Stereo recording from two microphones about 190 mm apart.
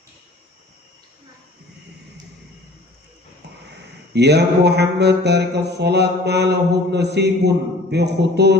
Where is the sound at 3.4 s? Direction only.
65° right (ahead or behind).